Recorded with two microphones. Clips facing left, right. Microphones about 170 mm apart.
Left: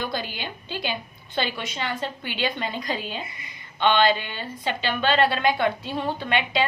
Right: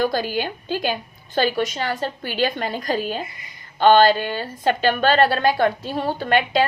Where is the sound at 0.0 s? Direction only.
40° right (ahead or behind).